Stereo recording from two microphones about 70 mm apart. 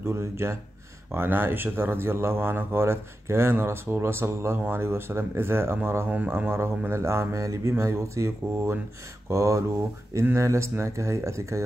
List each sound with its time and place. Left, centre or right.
0.0 s speech: right